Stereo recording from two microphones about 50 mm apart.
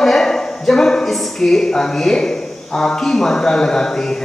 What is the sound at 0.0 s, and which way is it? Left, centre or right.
A man's voice, centre.